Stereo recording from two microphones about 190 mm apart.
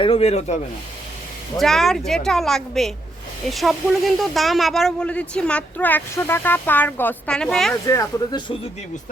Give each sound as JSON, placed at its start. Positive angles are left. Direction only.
{"t": 0.0, "sound": "speech", "side_deg": 30}
{"t": 1.5, "sound": "speech", "side_deg": 0}
{"t": 7.9, "sound": "speech", "side_deg": 20}